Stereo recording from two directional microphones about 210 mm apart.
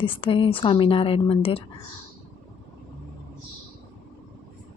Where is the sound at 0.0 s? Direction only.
25° left (ahead or behind).